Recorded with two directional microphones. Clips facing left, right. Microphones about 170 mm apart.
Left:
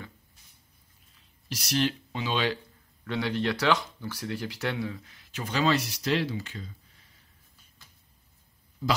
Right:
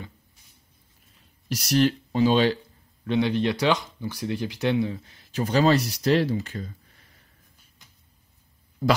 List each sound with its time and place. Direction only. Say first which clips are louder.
1.5 s speech: right 6 dB; 45° right (ahead or behind)
3.1 s speech: right 6 dB; 20° right (ahead or behind)
4.9 s speech: right 9 dB; 35° right (ahead or behind)
7.8 s a sound: even; 20° right (ahead or behind)